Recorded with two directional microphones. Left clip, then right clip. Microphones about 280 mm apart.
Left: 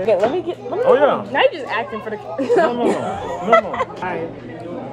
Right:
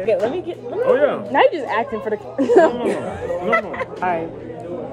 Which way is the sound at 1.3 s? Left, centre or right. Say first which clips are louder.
Right 1 dB; right.